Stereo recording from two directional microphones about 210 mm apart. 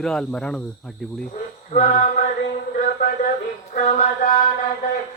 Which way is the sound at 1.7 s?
35° left (ahead or behind).